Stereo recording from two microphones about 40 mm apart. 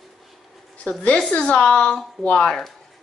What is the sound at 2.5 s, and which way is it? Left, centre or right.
Speech, centre.